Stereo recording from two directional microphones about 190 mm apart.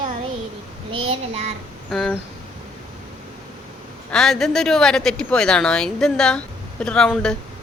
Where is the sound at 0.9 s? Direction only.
30° right (ahead or behind).